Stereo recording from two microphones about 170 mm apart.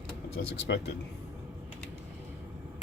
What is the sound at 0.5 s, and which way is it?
Speech, 90° left.